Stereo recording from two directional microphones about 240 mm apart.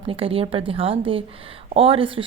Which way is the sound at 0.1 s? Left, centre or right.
Right.